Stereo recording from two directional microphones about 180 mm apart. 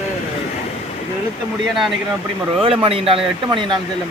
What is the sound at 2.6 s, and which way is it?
Speech, 30° right (ahead or behind).